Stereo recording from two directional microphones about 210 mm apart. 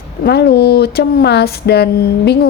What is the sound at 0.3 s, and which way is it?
Speech, 50° left (ahead or behind).